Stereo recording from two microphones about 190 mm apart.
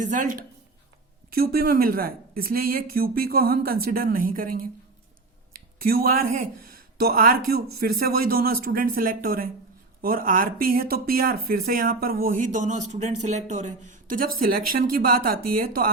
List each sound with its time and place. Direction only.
1.3 s speech: 55° right (ahead or behind)
5.8 s speech: 50° right (ahead or behind)